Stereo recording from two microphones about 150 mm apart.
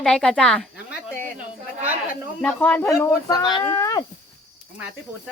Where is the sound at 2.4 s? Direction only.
10° left (ahead or behind).